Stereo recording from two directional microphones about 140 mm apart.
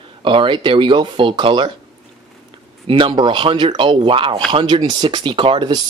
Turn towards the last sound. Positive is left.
turn(degrees=-35)  # may be behind; listen again after turning